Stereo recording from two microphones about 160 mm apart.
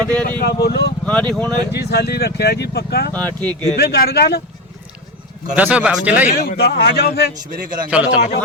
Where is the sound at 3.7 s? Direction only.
85° left.